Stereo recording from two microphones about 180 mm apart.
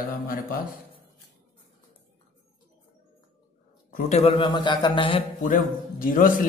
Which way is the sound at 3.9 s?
40° left (ahead or behind).